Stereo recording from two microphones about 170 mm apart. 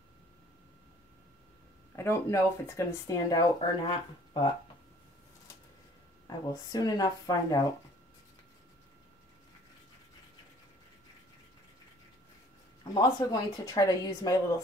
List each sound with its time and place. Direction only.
2.0 s speech: 15° left (ahead or behind)
6.2 s speech: 20° left (ahead or behind)
12.8 s speech: 20° left (ahead or behind)